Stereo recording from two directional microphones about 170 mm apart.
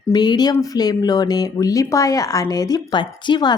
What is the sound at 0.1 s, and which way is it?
Speech, 25° left (ahead or behind).